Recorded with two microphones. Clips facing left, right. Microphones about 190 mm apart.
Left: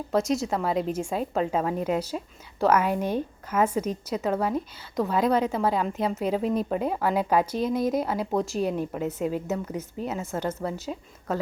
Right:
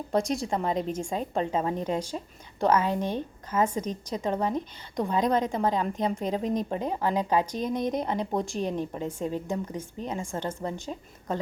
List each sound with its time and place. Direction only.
0.1 s a woman's voice: 5° left (ahead or behind)